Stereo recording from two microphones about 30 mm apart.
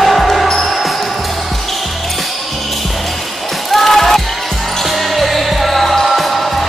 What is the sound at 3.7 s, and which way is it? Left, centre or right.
Basketball bounce, centre.